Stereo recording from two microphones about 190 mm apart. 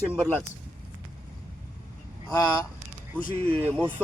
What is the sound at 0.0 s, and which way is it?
Speech, 10° right (ahead or behind).